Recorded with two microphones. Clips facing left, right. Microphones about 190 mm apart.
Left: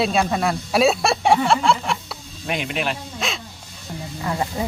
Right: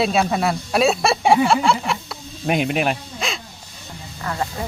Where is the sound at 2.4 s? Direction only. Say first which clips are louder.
Right 5 dB; 50° right (ahead or behind).